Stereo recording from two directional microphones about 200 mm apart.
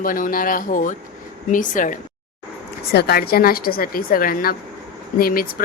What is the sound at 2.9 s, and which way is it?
A woman's voice, 50° left (ahead or behind).